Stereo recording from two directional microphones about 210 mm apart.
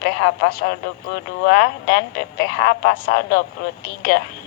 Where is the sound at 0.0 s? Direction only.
50° left (ahead or behind).